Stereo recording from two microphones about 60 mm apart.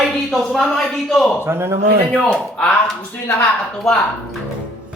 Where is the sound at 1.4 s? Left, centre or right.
Right.